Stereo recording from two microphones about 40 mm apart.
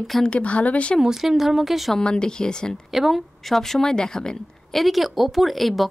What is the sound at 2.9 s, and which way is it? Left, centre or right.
Speech, centre.